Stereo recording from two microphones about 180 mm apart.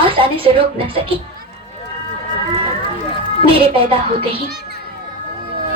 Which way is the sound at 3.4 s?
30° right (ahead or behind).